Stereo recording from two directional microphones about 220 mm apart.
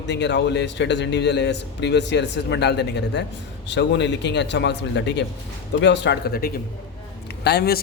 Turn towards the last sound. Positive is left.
turn(degrees=45)  # may be behind; listen again after turning